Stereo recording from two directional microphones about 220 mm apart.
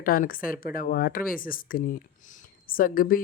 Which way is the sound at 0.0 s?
40° left (ahead or behind).